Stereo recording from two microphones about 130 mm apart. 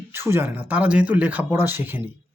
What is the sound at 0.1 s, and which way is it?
Speech, 20° right (ahead or behind).